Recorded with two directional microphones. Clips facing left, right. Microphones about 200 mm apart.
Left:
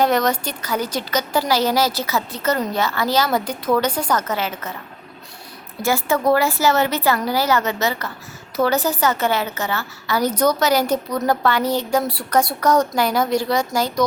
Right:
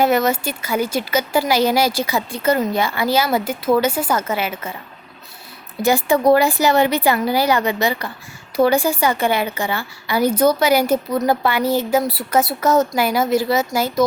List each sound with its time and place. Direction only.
0.0 s speech: 5° right (ahead or behind)
5.8 s a woman's voice: 15° right (ahead or behind)